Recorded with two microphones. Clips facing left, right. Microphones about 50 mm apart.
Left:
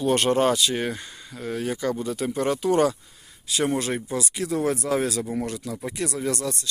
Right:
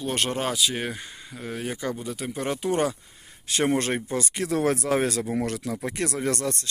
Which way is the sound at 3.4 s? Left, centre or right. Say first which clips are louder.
Right 1 dB; right.